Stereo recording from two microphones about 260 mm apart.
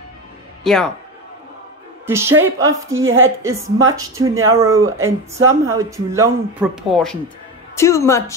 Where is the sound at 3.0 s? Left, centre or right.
Right.